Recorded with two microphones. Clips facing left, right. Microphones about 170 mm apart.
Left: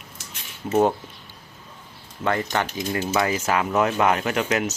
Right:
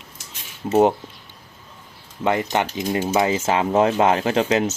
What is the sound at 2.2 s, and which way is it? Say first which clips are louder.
Cutlery: right 3 dB; 20° right (ahead or behind).